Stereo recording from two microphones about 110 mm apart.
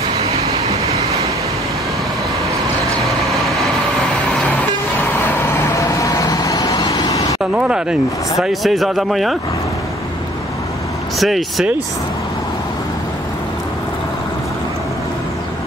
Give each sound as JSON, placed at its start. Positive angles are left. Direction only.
{"t": 0.2, "sound": "vehicle", "side_deg": -70}
{"t": 3.1, "sound": "vehicle", "side_deg": 0}
{"t": 5.8, "sound": "vehicle", "side_deg": 30}
{"t": 7.5, "sound": "speech", "side_deg": -10}
{"t": 11.1, "sound": "speech", "side_deg": 0}